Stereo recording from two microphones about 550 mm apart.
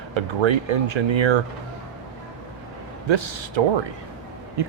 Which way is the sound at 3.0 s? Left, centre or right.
Right.